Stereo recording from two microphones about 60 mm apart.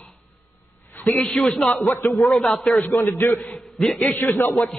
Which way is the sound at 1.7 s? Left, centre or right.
Centre.